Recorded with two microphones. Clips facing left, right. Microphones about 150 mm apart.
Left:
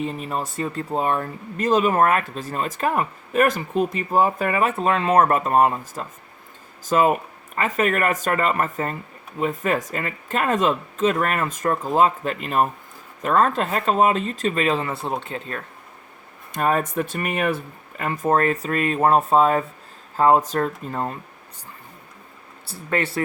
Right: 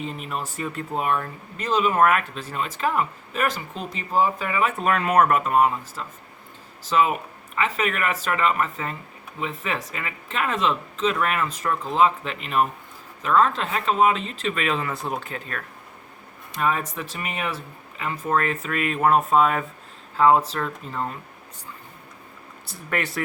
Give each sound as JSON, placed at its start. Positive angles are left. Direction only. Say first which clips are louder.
{"t": 0.2, "sound": "speech", "louder": "left 4 dB", "side_deg": 35}
{"t": 1.5, "sound": "speech", "louder": "left 3 dB", "side_deg": 45}
{"t": 2.0, "sound": "speech", "louder": "left 1 dB", "side_deg": 35}
{"t": 4.8, "sound": "speech", "louder": "left 1 dB", "side_deg": 25}
{"t": 16.6, "sound": "speech", "louder": "left 4 dB", "side_deg": 45}
{"t": 20.1, "sound": "speech", "louder": "left 1 dB", "side_deg": 45}
{"t": 22.6, "sound": "speech", "louder": "left 4 dB", "side_deg": 30}